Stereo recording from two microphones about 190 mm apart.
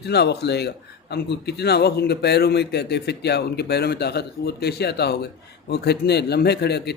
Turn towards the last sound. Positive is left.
turn(degrees=60)  # may be behind; listen again after turning